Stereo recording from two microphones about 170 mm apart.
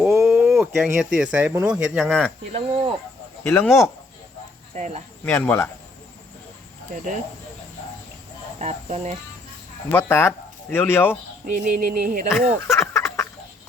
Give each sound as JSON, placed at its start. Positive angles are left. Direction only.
{"t": 0.0, "sound": "a sound", "side_deg": -10}
{"t": 0.5, "sound": "speech", "side_deg": 0}
{"t": 2.5, "sound": "speech", "side_deg": -35}
{"t": 3.4, "sound": "speech", "side_deg": 15}
{"t": 4.7, "sound": "speech", "side_deg": -40}
{"t": 5.2, "sound": "speech", "side_deg": 10}
{"t": 8.5, "sound": "speech", "side_deg": -40}
{"t": 9.9, "sound": "speech", "side_deg": 15}
{"t": 11.5, "sound": "a sound", "side_deg": -55}
{"t": 12.3, "sound": "speech", "side_deg": 15}